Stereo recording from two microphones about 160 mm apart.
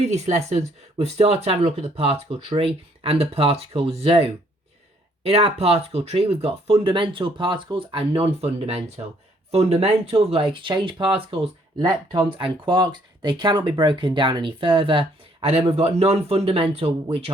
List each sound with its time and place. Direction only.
0.1 s speech: 45° right (ahead or behind)